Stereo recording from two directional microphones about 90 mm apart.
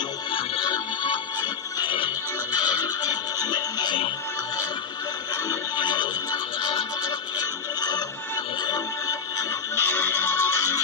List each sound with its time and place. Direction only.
0.3 s music: 60° left (ahead or behind)
5.8 s music: 55° left (ahead or behind)
7.1 s music: 45° left (ahead or behind)
9.8 s music: 25° left (ahead or behind)